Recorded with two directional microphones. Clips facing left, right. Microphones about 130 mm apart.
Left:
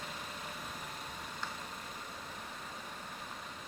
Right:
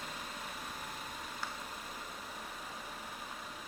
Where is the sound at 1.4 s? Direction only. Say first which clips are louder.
Even; 10° right (ahead or behind).